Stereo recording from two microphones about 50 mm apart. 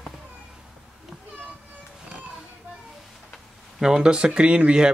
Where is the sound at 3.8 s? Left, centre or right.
Centre.